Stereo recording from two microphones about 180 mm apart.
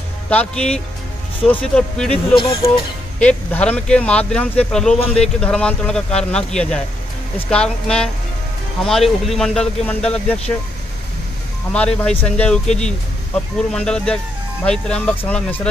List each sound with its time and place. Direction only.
0.3 s speech: 5° left (ahead or behind)
2.3 s speech: 30° left (ahead or behind)
3.2 s speech: 5° left (ahead or behind)
11.7 s speech: 5° left (ahead or behind)